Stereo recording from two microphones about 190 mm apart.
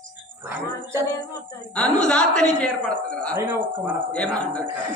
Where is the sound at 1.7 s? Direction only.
5° left (ahead or behind).